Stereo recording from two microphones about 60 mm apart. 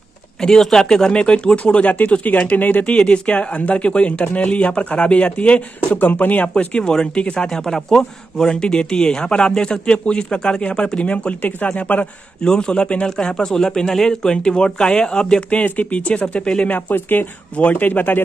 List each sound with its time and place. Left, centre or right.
0.4 s speech: centre
6.8 s speech: centre
12.4 s speech: centre
15.6 s speech: left
16.7 s speech: left